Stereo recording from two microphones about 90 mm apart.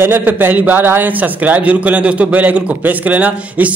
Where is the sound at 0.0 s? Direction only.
20° right (ahead or behind).